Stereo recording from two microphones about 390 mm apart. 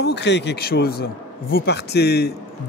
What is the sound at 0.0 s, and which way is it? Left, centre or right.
Speech, left.